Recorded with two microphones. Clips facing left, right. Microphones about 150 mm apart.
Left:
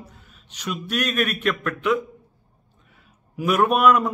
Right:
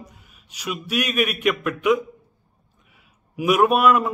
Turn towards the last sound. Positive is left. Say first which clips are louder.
# right 1 dB
turn(degrees=0)  # may be behind; listen again after turning